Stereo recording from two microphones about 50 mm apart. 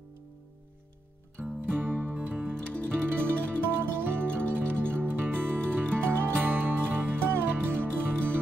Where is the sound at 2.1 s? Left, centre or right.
Right.